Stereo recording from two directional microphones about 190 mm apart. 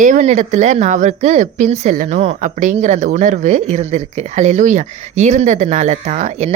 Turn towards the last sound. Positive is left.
turn(degrees=-35)  # may be behind; listen again after turning